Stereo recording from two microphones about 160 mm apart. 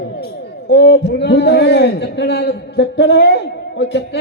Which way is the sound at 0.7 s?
90° left.